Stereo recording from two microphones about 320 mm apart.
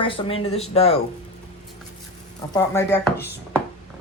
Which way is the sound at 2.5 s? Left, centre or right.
Centre.